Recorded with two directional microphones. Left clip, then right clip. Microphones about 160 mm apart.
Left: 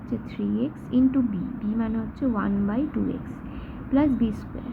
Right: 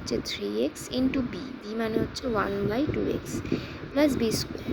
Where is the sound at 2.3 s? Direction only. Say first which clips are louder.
Right 4 dB; 60° right (ahead or behind).